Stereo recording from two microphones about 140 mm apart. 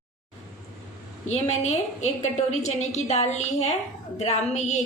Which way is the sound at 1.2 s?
55° left (ahead or behind).